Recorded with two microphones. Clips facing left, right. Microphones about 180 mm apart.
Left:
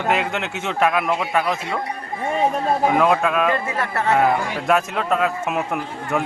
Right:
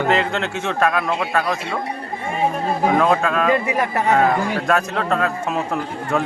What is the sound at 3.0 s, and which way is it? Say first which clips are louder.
Speech: even; 10° left (ahead or behind).